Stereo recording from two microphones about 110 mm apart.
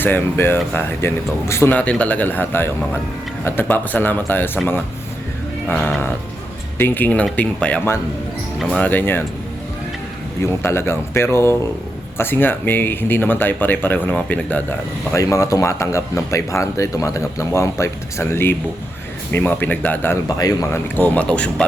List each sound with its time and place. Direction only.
0.0 s speech: 20° left (ahead or behind)
1.7 s speech: 10° left (ahead or behind)
8.8 s speech: 15° left (ahead or behind)
10.4 s speech: 25° left (ahead or behind)
15.1 s speech: 30° left (ahead or behind)
20.2 s speech: 35° left (ahead or behind)
20.9 s speech: 15° left (ahead or behind)